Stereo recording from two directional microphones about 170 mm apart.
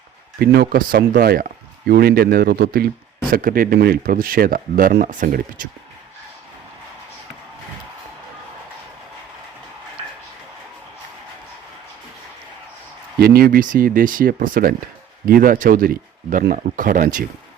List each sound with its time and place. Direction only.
0.3 s speech: 65° right (ahead or behind)
13.1 s speech: 65° right (ahead or behind)